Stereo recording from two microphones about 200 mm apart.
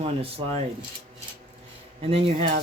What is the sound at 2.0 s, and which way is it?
Speech, 30° right (ahead or behind).